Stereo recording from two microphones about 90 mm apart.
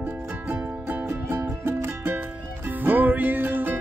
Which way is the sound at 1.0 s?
25° right (ahead or behind).